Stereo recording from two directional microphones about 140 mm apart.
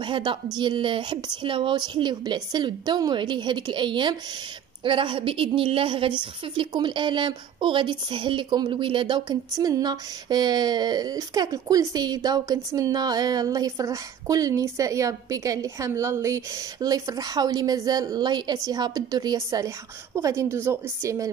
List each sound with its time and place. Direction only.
0.0 s a woman's voice: 35° right (ahead or behind); by 21.3 s 20° right (ahead or behind)